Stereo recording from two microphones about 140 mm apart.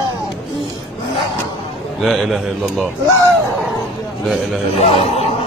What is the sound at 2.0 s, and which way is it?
Speech, centre (ahead or behind).